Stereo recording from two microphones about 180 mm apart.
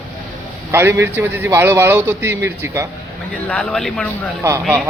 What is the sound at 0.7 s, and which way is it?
A man's voice, 15° right (ahead or behind).